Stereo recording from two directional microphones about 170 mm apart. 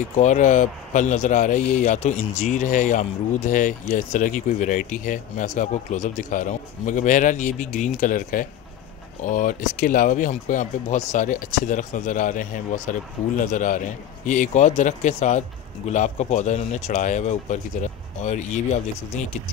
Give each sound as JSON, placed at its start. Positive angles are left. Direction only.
{"t": 0.0, "sound": "speech", "side_deg": 45}